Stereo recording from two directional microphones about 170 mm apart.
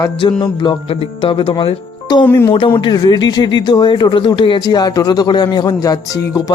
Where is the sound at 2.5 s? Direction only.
30° left (ahead or behind).